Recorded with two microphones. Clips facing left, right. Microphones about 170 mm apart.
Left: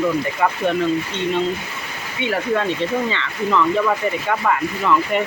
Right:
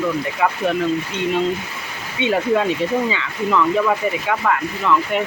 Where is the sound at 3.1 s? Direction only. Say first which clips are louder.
Even; 5° right (ahead or behind).